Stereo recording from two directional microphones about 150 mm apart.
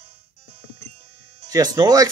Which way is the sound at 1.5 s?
25° right (ahead or behind).